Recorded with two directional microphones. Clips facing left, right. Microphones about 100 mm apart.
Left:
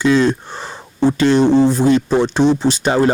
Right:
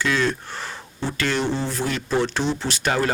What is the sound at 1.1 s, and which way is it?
Speech, 20° left (ahead or behind).